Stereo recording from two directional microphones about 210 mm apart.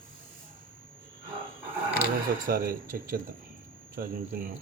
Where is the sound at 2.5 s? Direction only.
45° right (ahead or behind).